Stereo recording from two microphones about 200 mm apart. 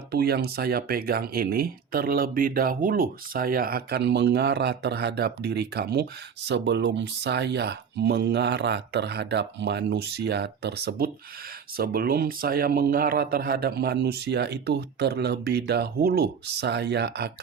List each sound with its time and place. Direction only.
0.1 s speech: 55° right (ahead or behind)